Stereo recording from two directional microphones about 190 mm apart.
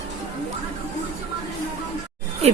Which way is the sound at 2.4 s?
35° right (ahead or behind).